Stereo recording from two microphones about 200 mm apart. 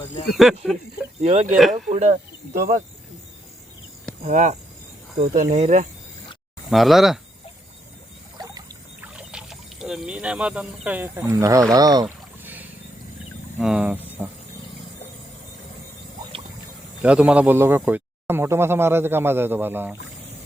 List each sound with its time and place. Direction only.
0.3 s speech: centre (ahead or behind)
1.2 s speech: 35° right (ahead or behind)
2.6 s speech: 45° right (ahead or behind)
4.2 s speech: 40° right (ahead or behind)
6.7 s speech: centre (ahead or behind)
9.0 s speech: 5° right (ahead or behind)
11.7 s boat: 20° right (ahead or behind)
13.6 s speech: 5° right (ahead or behind)
14.2 s wild animals: 10° right (ahead or behind)
17.0 s speech: 5° right (ahead or behind)